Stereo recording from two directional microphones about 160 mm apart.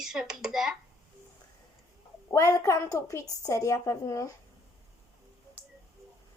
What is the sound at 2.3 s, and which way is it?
A woman's voice, 20° left (ahead or behind).